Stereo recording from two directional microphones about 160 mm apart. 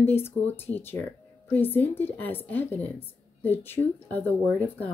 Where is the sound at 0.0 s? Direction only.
15° left (ahead or behind).